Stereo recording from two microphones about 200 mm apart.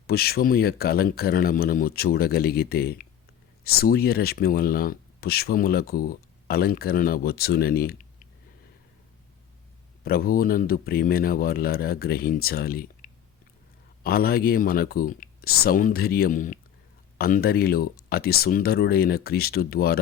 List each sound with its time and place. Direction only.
0.1 s speech: 50° left (ahead or behind)
10.0 s speech: 50° left (ahead or behind)